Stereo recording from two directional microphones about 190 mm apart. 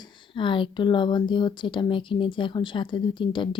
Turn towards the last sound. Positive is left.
turn(degrees=25)  # may be behind; listen again after turning